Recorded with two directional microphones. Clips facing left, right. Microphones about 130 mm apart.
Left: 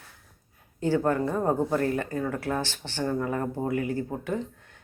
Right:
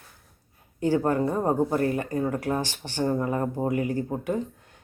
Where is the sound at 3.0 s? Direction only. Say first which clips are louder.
Right 2 dB; 25° right (ahead or behind).